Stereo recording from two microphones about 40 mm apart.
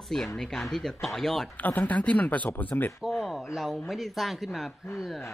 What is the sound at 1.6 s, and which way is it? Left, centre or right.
Speech, left.